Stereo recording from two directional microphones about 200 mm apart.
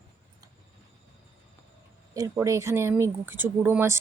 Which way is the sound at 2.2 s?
15° right (ahead or behind).